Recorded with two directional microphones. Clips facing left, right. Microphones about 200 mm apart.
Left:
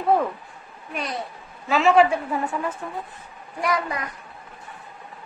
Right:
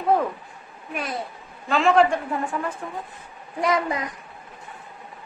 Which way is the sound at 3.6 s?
20° right (ahead or behind).